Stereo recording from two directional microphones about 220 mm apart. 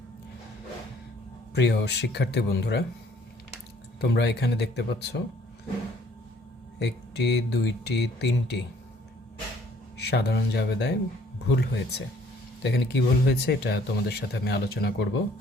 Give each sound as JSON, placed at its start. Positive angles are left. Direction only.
{"t": 1.5, "sound": "speech", "side_deg": 50}
{"t": 4.0, "sound": "speech", "side_deg": 50}
{"t": 6.7, "sound": "speech", "side_deg": 50}
{"t": 10.0, "sound": "speech", "side_deg": 45}